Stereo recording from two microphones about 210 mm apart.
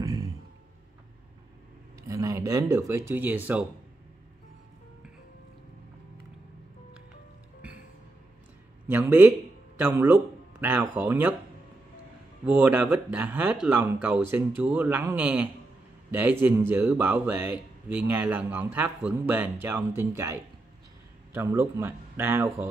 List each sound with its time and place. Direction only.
0.0 s a sound: 15° right (ahead or behind)
2.0 s speech: 15° right (ahead or behind)
8.8 s a man's voice: 10° right (ahead or behind)
12.5 s a man's voice: 5° right (ahead or behind)